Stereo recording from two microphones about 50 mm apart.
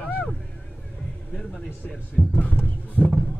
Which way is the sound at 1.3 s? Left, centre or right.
Centre.